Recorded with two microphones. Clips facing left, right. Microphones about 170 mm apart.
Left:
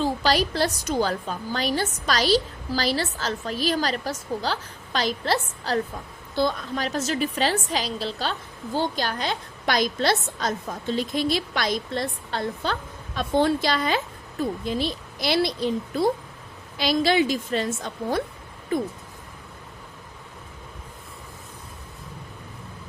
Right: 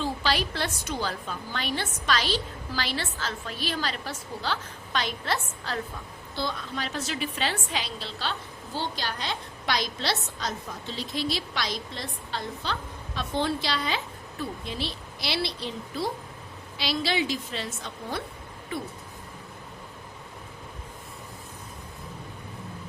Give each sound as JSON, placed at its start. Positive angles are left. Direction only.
{"t": 0.0, "sound": "a woman's voice", "side_deg": 40}